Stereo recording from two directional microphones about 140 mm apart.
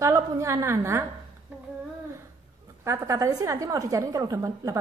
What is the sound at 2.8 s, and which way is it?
A woman's voice, 20° right (ahead or behind).